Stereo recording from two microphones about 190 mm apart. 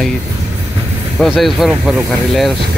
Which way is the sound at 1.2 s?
Centre (ahead or behind).